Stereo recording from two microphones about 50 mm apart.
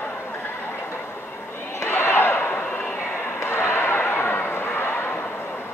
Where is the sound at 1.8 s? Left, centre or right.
Left.